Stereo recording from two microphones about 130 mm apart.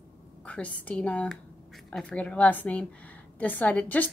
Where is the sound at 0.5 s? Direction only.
10° left (ahead or behind).